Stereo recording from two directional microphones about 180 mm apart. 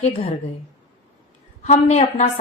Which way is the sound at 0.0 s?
35° left (ahead or behind).